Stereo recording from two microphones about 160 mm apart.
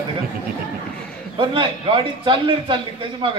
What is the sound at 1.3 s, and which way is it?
Speech, 30° right (ahead or behind).